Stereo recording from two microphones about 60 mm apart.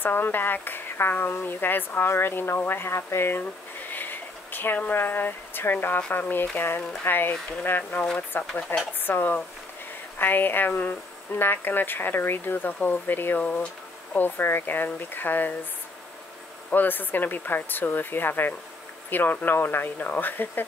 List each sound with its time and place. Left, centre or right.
0.0 s speech: left
16.7 s speech: left